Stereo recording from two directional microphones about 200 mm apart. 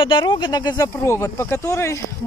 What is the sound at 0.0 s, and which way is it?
Speech, 25° left (ahead or behind).